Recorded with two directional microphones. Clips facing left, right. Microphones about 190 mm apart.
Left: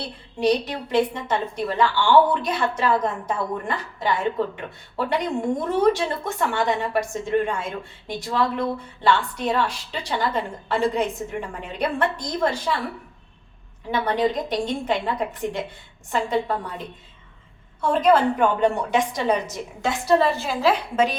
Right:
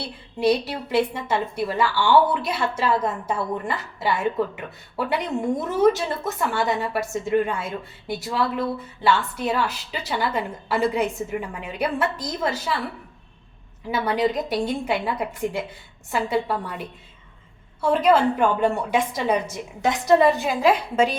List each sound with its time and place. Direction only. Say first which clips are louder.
0.0 s a woman's voice: even; 10° right (ahead or behind)
13.9 s a woman's voice: even; 5° right (ahead or behind)
16.1 s a woman's voice: even; 5° right (ahead or behind)
19.8 s a woman's voice: right 2 dB; 20° right (ahead or behind)